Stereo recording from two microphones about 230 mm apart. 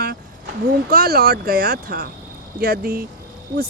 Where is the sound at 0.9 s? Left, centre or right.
Right.